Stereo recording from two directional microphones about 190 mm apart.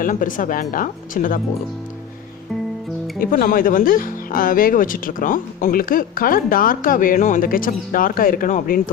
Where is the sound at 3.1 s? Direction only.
50° left (ahead or behind).